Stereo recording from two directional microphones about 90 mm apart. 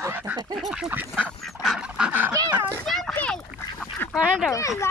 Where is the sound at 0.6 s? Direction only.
5° right (ahead or behind).